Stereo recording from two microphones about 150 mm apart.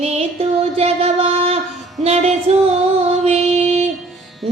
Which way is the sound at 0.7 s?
40° right (ahead or behind).